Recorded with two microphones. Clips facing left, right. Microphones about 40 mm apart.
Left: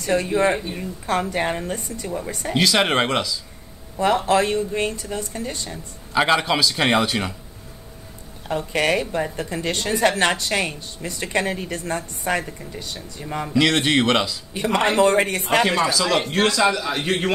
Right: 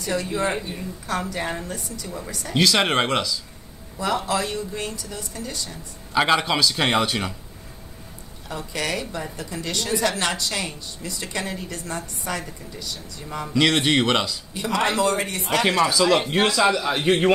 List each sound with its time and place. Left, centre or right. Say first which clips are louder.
0.1 s a woman's voice: left 5 dB; left
2.5 s speech: left 1 dB; centre
4.0 s a woman's voice: left 6 dB; left
6.1 s speech: left 1 dB; centre
8.5 s a woman's voice: left 7 dB; left
13.6 s speech: left 1 dB; centre
14.5 s a woman's voice: left 3 dB; left
15.9 s speech: right 2 dB; centre